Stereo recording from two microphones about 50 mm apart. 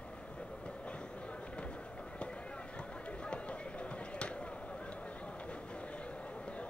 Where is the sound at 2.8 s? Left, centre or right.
Left.